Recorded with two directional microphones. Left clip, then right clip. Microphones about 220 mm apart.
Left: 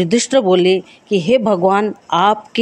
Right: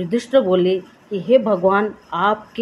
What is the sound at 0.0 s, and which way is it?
Speech, 45° left (ahead or behind).